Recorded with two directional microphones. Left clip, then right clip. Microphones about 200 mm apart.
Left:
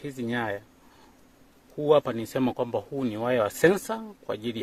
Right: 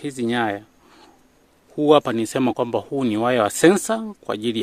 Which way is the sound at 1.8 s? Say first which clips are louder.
Right 6 dB; 50° right (ahead or behind).